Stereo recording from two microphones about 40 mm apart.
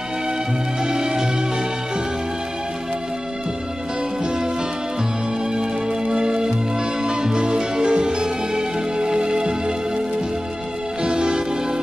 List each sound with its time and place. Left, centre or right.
0.8 s music: centre
5.5 s music: centre